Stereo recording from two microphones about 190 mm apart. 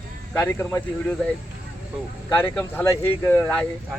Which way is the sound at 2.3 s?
10° left (ahead or behind).